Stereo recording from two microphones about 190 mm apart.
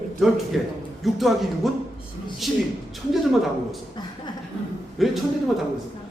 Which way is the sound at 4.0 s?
20° left (ahead or behind).